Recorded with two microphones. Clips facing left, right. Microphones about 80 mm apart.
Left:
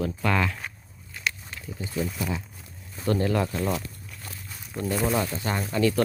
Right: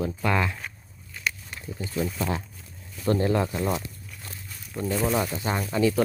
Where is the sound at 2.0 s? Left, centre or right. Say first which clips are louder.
Right 2 dB; centre.